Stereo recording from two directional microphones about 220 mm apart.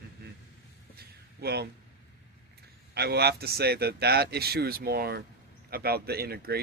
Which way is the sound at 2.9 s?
45° right (ahead or behind).